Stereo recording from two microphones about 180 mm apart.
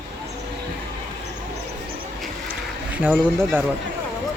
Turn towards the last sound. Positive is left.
turn(degrees=-5)  # may be behind; listen again after turning